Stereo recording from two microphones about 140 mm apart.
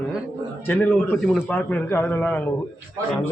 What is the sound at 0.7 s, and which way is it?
A man's voice, 10° left (ahead or behind).